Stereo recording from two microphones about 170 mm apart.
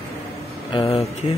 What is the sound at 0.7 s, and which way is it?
Speech, 30° left (ahead or behind).